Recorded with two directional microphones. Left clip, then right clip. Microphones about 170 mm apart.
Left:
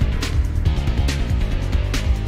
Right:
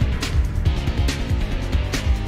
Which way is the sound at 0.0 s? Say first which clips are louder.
Even; centre (ahead or behind).